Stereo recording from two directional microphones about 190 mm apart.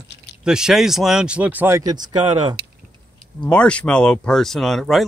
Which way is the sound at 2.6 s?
55° right (ahead or behind).